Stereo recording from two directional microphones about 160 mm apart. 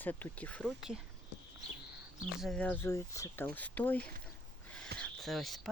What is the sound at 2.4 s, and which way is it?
Speech, 5° left (ahead or behind).